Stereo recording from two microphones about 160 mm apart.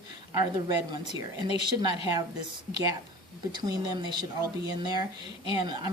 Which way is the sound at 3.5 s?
25° right (ahead or behind).